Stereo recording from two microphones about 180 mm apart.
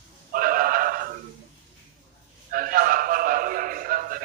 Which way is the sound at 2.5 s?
50° right (ahead or behind).